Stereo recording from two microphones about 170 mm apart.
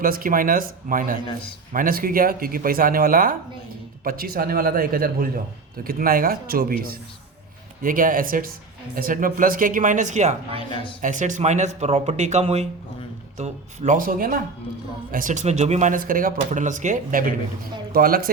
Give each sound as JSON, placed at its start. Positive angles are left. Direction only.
{"t": 0.0, "sound": "speech", "side_deg": -55}
{"t": 10.7, "sound": "a woman's voice", "side_deg": 30}
{"t": 11.0, "sound": "speech", "side_deg": -50}